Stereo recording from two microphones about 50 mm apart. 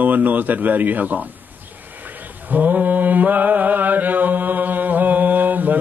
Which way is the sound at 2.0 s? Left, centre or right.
Right.